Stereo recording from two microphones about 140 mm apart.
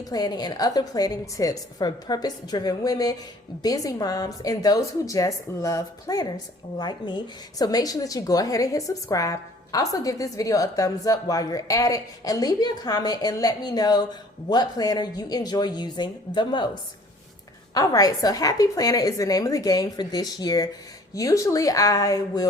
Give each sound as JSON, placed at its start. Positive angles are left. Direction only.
{"t": 0.0, "sound": "a woman's voice", "side_deg": 25}
{"t": 17.7, "sound": "a woman's voice", "side_deg": 25}